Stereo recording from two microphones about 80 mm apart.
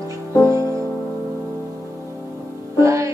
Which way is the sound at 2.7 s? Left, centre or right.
Right.